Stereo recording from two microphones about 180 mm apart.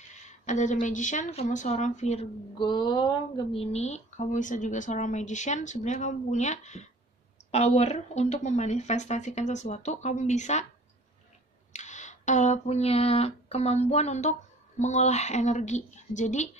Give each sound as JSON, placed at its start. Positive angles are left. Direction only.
{"t": 0.3, "sound": "a woman's voice", "side_deg": 40}
{"t": 2.6, "sound": "speech", "side_deg": 25}
{"t": 11.7, "sound": "a sound", "side_deg": 40}
{"t": 14.8, "sound": "speech", "side_deg": 40}